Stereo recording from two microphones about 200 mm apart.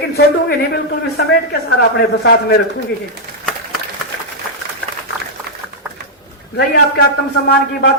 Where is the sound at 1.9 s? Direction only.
50° left (ahead or behind).